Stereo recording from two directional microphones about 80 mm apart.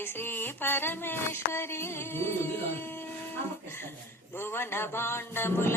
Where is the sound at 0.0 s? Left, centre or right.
Left.